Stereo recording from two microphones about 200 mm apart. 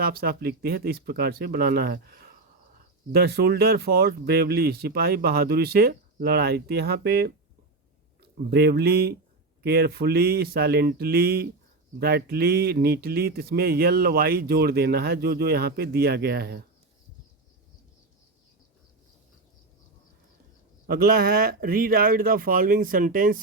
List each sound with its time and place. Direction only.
0.0 s speech: 50° right (ahead or behind)
8.4 s speech: 55° right (ahead or behind)
20.8 s speech: 50° right (ahead or behind)